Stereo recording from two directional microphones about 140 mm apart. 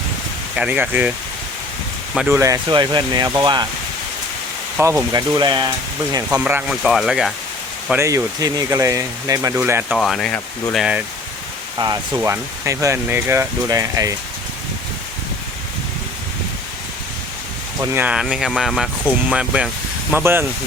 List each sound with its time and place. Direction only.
0.5 s speech: 10° right (ahead or behind)
2.3 s speech: 20° right (ahead or behind)
2.6 s speech: 30° right (ahead or behind)
4.8 s speech: 20° right (ahead or behind)
6.3 s speech: 10° right (ahead or behind)
7.9 s speech: 20° right (ahead or behind)
10.0 s speech: 5° left (ahead or behind)
12.1 s speech: 20° right (ahead or behind)
17.7 s speech: 15° right (ahead or behind)
18.1 s speech: 5° right (ahead or behind)